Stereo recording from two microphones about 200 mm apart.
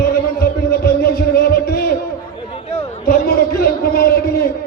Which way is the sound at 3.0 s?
50° left (ahead or behind).